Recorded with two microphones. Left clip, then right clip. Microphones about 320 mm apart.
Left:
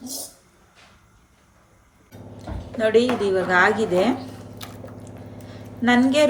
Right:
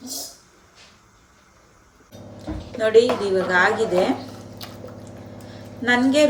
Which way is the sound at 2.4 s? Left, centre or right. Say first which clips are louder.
Even; left.